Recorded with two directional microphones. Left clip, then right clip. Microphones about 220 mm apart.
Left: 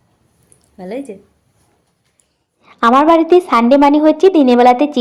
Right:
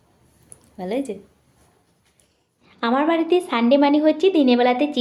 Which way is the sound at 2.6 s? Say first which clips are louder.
Left 11 dB; 25° left (ahead or behind).